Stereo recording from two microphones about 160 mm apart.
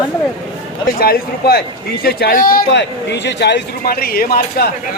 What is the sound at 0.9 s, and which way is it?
A man's voice, 70° left (ahead or behind).